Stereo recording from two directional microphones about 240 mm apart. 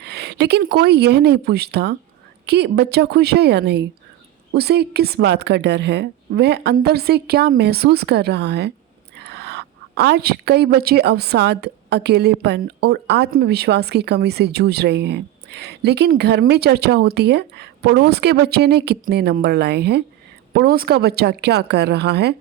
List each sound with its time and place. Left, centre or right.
0.0 s a woman's voice: right